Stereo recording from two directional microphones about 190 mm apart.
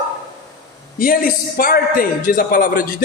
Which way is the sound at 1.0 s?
50° left (ahead or behind).